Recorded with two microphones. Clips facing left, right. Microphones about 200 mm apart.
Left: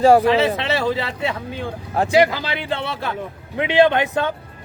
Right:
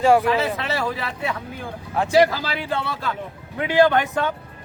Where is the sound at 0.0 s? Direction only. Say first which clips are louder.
Left 4 dB; 35° left (ahead or behind).